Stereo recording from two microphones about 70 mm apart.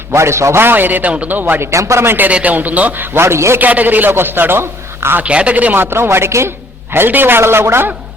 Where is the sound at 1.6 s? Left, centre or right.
Right.